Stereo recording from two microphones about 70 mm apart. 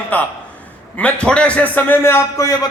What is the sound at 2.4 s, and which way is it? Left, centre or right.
Speech, left.